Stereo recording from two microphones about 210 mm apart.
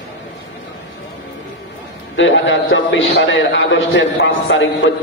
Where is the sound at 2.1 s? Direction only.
65° left (ahead or behind).